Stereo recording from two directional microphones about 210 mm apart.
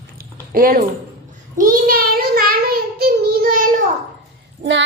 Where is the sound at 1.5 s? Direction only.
45° right (ahead or behind).